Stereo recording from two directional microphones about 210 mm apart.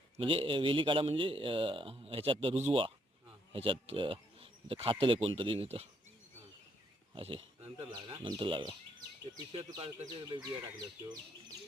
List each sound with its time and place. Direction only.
0.2 s a man's voice: 25° right (ahead or behind)
7.1 s speech: 25° right (ahead or behind)